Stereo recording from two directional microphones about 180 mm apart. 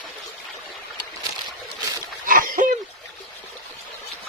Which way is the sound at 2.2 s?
50° right (ahead or behind).